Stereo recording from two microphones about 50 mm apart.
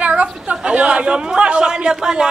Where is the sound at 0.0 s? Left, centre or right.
Right.